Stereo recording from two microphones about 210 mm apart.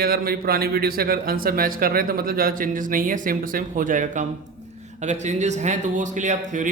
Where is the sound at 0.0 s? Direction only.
45° right (ahead or behind).